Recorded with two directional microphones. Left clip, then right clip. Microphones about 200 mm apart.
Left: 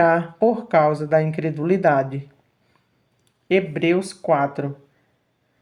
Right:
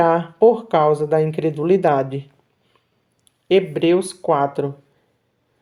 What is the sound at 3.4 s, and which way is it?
Speech, 30° right (ahead or behind).